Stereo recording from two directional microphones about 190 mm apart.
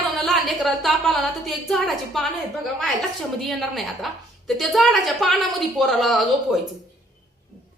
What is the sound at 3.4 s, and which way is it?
A woman's voice, centre (ahead or behind).